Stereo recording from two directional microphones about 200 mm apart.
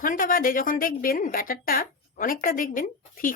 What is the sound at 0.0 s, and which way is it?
A woman's voice, 45° left (ahead or behind).